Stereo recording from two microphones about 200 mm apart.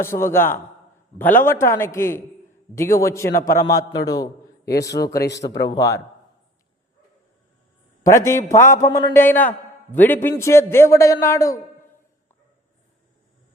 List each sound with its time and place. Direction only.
0.0 s a man's voice: 10° left (ahead or behind)
8.0 s a man's voice: 15° left (ahead or behind)